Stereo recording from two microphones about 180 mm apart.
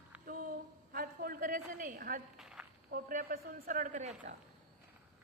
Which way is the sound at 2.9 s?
50° right (ahead or behind).